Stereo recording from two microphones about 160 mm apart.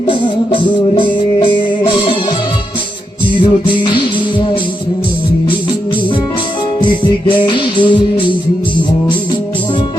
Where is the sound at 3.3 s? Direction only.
30° left (ahead or behind).